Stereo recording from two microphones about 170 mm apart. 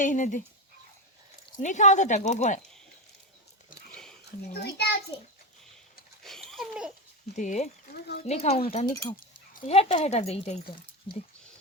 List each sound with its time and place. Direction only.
0.0 s speech: 45° left (ahead or behind)
1.5 s speech: 45° left (ahead or behind)
4.6 s a child's voice: 75° left (ahead or behind)
6.2 s laughter: centre (ahead or behind)
7.3 s speech: 45° left (ahead or behind)
7.9 s a child's voice: 70° left (ahead or behind)
8.2 s speech: 40° left (ahead or behind)
8.9 s speech: 20° left (ahead or behind)
9.6 s speech: 40° left (ahead or behind)